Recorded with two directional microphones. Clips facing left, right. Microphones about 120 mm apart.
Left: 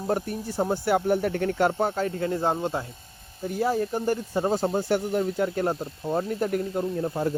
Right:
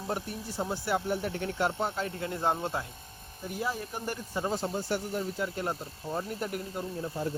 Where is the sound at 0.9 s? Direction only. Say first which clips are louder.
Left 7 dB; 60° left (ahead or behind).